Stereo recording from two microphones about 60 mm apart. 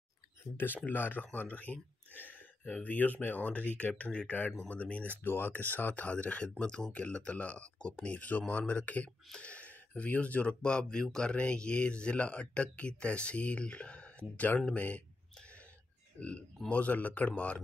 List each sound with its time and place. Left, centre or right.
0.7 s speech: left
5.2 s speech: left
16.2 s speech: left